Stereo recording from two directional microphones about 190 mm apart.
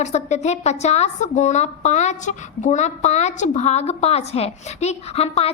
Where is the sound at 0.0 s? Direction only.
35° left (ahead or behind).